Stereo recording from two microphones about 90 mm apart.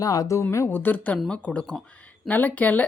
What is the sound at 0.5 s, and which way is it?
Speech, 25° left (ahead or behind).